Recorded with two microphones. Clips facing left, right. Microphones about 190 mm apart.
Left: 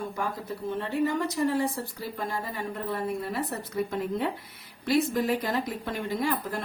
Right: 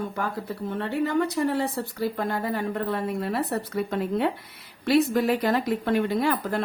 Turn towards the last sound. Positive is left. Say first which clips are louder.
# right 4 dB
turn(degrees=-70)  # may be behind; listen again after turning